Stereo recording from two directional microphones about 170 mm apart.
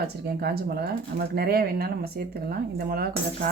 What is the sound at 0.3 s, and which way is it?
Speech, 70° right (ahead or behind).